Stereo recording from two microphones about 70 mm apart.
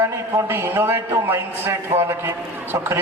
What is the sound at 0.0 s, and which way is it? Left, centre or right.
A man's voice, right.